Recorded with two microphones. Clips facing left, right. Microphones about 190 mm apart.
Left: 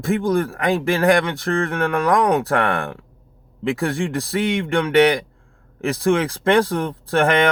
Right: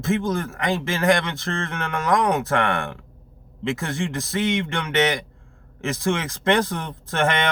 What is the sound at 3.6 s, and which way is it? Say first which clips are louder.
A man's voice: left 4 dB; 55° left (ahead or behind).